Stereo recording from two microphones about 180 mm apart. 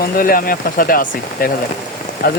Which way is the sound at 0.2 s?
55° left (ahead or behind).